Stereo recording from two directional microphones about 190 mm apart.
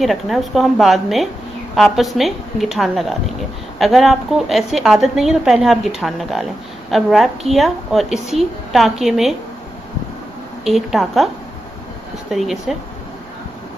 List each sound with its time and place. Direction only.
0.0 s a woman's voice: centre (ahead or behind)
10.6 s a woman's voice: centre (ahead or behind)
12.3 s a woman's voice: centre (ahead or behind)